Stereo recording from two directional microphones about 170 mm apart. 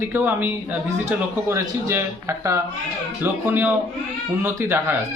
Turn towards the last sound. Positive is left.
turn(degrees=-15)  # may be behind; listen again after turning